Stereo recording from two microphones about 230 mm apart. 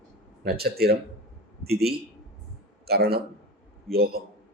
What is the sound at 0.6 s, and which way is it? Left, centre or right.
Speech, right.